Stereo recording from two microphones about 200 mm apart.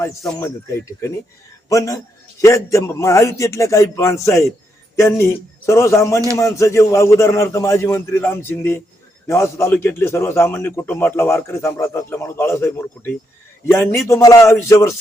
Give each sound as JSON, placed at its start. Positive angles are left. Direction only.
{"t": 0.3, "sound": "a man's voice", "side_deg": 15}